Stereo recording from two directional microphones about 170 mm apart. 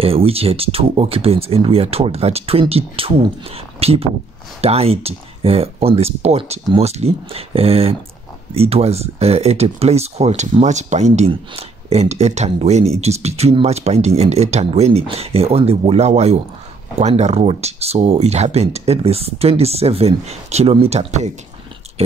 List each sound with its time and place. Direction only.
0.0 s speech: 35° right (ahead or behind)